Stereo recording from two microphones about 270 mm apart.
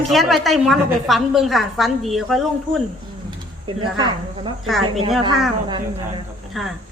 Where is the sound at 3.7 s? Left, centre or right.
Centre.